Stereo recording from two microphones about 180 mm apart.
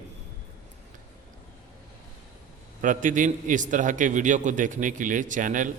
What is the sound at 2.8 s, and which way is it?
A man's voice, 45° right (ahead or behind).